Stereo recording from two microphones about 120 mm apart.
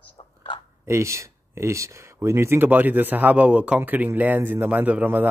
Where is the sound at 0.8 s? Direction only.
25° right (ahead or behind).